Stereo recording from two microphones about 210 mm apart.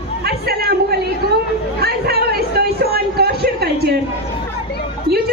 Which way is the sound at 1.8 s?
50° right (ahead or behind).